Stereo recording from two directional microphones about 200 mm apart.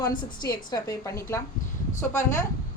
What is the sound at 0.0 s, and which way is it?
A woman's voice, 20° left (ahead or behind).